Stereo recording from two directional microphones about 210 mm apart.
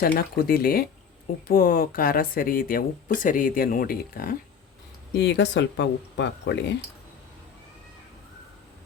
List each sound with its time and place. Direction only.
0.0 s speech: 45° left (ahead or behind)